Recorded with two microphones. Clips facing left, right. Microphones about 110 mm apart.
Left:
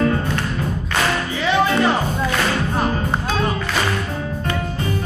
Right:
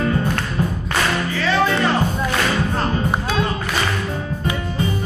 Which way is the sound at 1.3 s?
15° left (ahead or behind).